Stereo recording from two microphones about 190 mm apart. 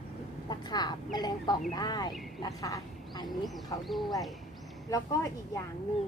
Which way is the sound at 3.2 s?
Centre (ahead or behind).